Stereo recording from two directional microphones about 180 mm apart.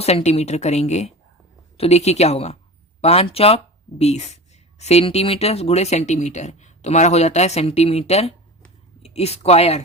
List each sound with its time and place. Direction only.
0.0 s speech: 35° left (ahead or behind)